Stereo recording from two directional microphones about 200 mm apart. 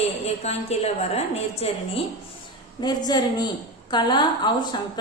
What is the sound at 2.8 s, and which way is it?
A woman's voice, 20° left (ahead or behind).